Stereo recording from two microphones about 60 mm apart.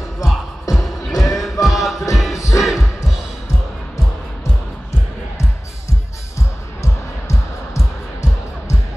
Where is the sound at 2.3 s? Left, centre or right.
Left.